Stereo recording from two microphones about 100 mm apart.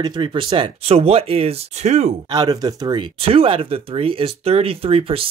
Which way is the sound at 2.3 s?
40° right (ahead or behind).